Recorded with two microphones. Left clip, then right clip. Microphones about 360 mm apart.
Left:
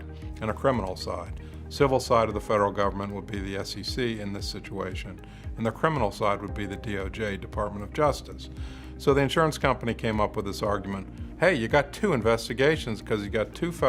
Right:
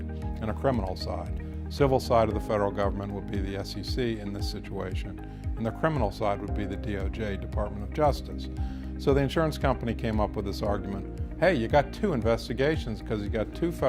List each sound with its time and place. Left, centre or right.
0.4 s speech: right
5.6 s speech: right